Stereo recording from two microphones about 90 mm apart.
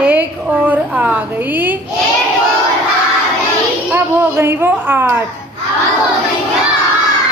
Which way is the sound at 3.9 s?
25° right (ahead or behind).